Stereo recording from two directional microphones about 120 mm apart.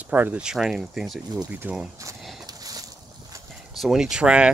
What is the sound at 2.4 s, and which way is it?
Boat, 30° right (ahead or behind).